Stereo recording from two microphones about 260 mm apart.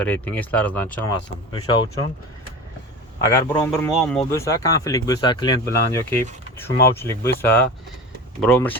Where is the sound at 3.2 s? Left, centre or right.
Centre.